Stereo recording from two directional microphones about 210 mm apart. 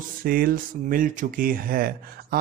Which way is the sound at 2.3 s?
45° right (ahead or behind).